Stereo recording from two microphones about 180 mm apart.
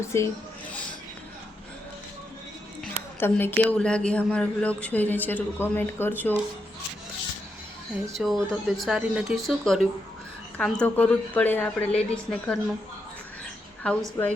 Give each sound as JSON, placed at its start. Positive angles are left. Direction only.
{"t": 0.0, "sound": "speech", "side_deg": 15}
{"t": 2.8, "sound": "speech", "side_deg": 10}
{"t": 8.2, "sound": "speech", "side_deg": 0}
{"t": 13.8, "sound": "speech", "side_deg": 5}